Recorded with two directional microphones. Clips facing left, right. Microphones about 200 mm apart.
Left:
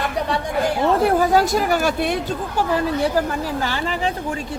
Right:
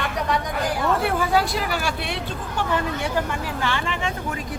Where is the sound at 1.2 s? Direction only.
40° left (ahead or behind).